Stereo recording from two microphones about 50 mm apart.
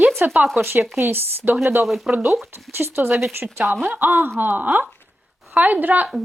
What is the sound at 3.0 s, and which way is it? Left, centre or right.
Speech, right.